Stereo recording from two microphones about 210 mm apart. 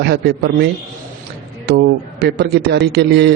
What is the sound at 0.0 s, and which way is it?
A man's voice, 55° right (ahead or behind).